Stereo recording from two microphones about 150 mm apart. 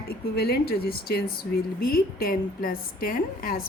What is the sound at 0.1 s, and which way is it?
Speech, 90° left.